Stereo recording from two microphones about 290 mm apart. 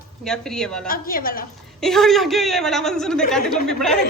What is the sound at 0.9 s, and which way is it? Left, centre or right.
Speech, left.